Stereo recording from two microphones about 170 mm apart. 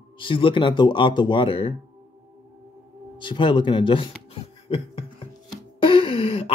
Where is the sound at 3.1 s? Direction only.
30° left (ahead or behind).